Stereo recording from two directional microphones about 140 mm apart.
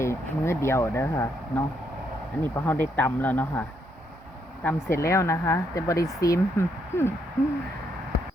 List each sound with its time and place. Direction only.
0.0 s speech: 20° left (ahead or behind)